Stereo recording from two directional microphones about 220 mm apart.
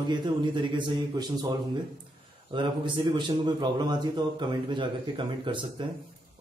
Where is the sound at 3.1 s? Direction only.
20° right (ahead or behind).